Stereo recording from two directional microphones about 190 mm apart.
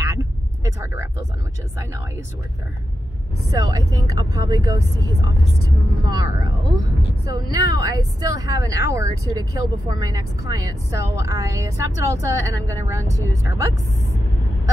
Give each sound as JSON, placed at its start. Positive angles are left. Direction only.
{"t": 0.2, "sound": "vehicle", "side_deg": -15}
{"t": 3.7, "sound": "speech", "side_deg": -20}